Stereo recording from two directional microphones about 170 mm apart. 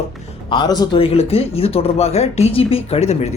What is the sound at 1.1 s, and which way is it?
Speech, 35° left (ahead or behind).